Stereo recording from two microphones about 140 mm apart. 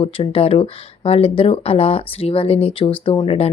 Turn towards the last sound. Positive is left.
turn(degrees=45)  # may be behind; listen again after turning